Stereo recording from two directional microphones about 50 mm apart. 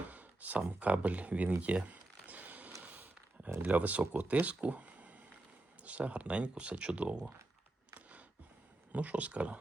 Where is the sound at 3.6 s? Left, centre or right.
Right.